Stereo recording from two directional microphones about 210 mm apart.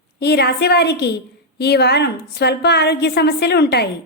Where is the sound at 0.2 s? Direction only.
50° left (ahead or behind).